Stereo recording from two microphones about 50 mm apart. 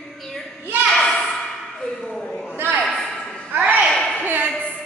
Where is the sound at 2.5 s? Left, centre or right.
Right.